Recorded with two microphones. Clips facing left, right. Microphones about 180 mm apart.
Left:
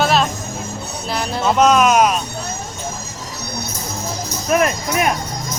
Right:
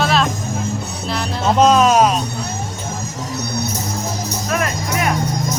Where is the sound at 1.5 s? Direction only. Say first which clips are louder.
Right 1 dB; 30° right (ahead or behind).